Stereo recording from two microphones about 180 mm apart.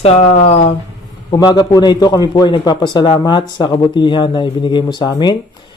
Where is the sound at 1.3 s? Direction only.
20° left (ahead or behind).